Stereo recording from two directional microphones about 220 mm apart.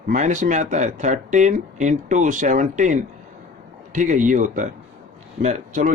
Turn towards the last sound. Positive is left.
turn(degrees=-35)  # may be behind; listen again after turning